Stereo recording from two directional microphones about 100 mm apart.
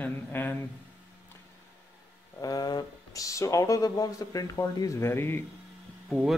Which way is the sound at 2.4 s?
40° left (ahead or behind).